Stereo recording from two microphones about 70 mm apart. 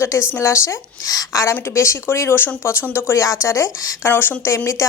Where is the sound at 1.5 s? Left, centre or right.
Left.